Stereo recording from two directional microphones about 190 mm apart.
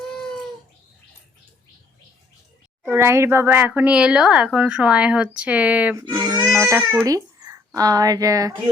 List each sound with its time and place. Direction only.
2.9 s speech: 15° right (ahead or behind)
6.0 s speech: 20° right (ahead or behind)